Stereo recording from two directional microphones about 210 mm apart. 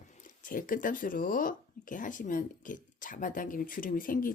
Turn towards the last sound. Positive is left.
turn(degrees=40)  # may be behind; listen again after turning